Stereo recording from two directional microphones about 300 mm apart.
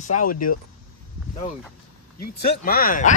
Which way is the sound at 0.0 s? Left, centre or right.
Left.